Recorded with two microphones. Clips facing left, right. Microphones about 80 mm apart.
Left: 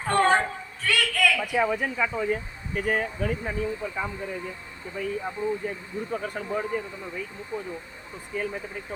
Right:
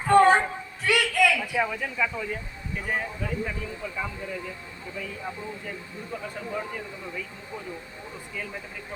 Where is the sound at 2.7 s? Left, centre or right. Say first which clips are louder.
Left 4 dB; left.